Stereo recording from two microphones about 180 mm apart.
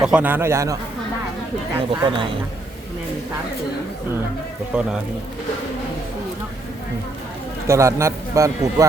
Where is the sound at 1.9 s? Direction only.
25° right (ahead or behind).